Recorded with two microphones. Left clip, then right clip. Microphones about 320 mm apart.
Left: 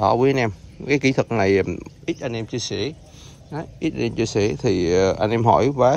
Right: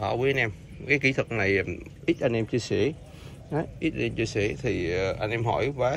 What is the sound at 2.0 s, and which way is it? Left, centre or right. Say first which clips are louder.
Speech: right 2 dB; centre.